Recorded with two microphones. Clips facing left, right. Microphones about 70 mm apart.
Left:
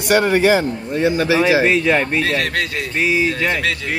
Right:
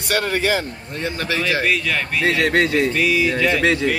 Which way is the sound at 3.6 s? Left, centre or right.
Right.